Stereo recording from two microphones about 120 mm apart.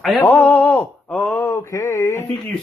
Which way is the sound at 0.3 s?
10° left (ahead or behind).